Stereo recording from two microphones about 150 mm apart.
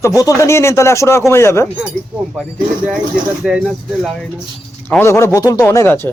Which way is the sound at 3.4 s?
5° right (ahead or behind).